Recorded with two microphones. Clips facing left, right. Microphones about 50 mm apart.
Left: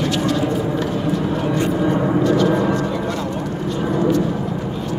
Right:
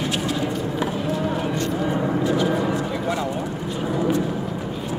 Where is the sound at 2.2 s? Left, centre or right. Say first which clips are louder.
Left 5 dB; centre.